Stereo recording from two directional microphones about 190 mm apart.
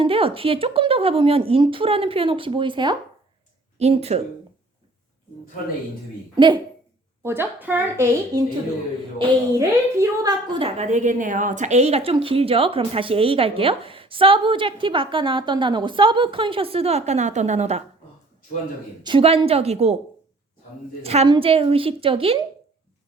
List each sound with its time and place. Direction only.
0.0 s a woman's voice: 30° right (ahead or behind)
6.3 s a woman's voice: 25° right (ahead or behind)
7.2 s a woman's voice: 10° right (ahead or behind)
10.6 s a woman's voice: 40° right (ahead or behind)
19.0 s a woman's voice: 30° right (ahead or behind)
21.0 s a woman's voice: 30° right (ahead or behind)